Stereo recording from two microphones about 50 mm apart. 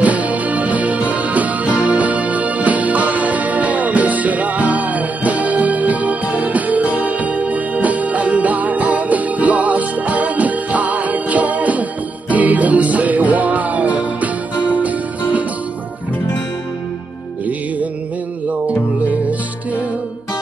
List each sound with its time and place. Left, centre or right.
0.0 s music: right